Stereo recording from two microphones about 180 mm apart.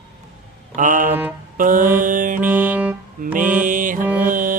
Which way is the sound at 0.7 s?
45° right (ahead or behind).